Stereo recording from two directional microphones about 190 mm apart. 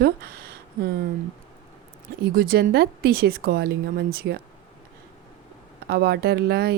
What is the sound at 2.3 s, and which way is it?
Speech, 55° right (ahead or behind).